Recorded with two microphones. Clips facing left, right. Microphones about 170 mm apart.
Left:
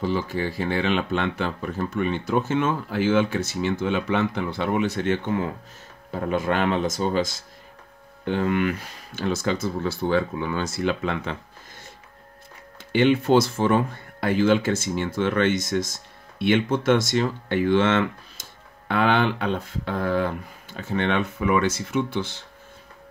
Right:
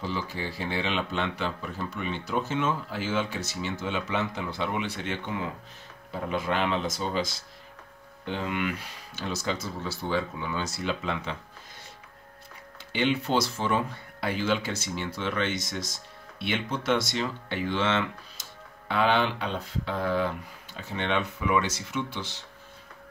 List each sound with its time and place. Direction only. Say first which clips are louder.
0.0 s speech: left 7 dB; 55° left (ahead or behind)
12.9 s speech: left 8 dB; 50° left (ahead or behind)